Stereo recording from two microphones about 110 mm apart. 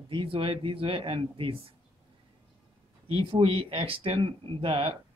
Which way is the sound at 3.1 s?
60° right (ahead or behind).